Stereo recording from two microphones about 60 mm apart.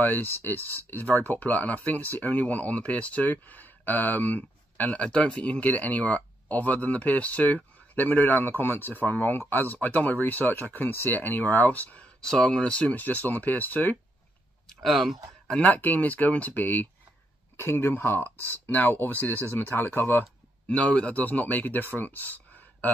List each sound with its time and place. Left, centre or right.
0.0 s speech: left
12.2 s speech: centre; by 13.9 s left
14.7 s speech: centre
15.6 s speech: left
17.6 s speech: left
20.6 s speech: left